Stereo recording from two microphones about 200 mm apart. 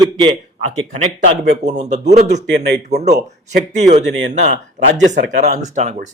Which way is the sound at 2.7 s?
55° right (ahead or behind).